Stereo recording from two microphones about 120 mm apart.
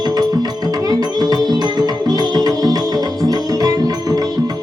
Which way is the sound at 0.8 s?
35° right (ahead or behind).